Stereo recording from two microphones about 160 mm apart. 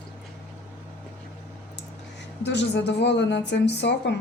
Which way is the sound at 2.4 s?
90° left.